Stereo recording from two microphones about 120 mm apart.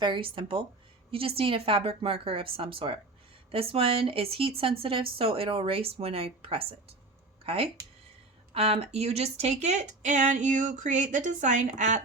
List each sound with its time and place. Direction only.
0.0 s speech: 45° right (ahead or behind); by 12.0 s 90° right